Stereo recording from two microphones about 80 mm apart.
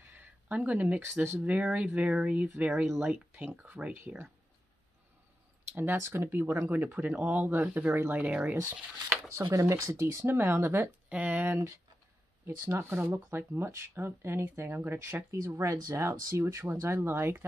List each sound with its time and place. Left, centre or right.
0.0 s a sound: right
1.4 s speech: centre
5.8 s speech: right
8.5 s speech: right
11.1 s speech: centre
12.4 s speech: right
15.3 s speech: right